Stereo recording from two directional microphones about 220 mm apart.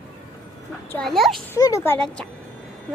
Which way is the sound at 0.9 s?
5° left (ahead or behind).